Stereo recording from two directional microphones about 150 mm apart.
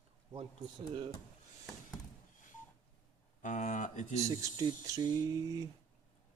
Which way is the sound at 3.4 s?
55° left (ahead or behind).